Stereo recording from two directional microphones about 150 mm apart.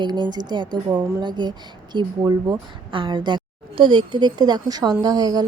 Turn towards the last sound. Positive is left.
turn(degrees=-25)  # may be behind; listen again after turning